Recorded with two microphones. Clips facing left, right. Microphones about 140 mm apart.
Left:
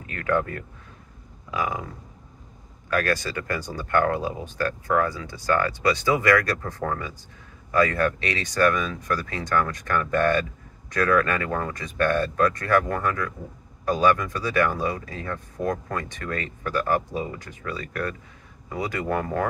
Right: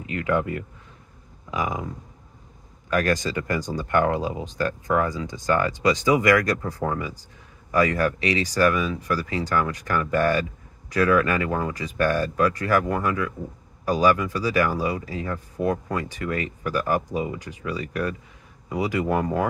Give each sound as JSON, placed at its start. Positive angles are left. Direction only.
{"t": 0.0, "sound": "speech", "side_deg": -20}
{"t": 2.9, "sound": "speech", "side_deg": -15}